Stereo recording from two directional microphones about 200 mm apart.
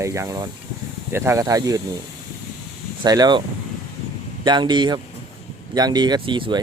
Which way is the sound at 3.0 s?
20° right (ahead or behind).